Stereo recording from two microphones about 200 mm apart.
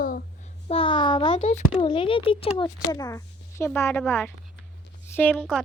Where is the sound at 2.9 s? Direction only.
20° left (ahead or behind).